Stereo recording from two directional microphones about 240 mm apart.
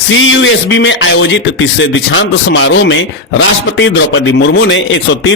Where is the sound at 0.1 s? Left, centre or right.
Left.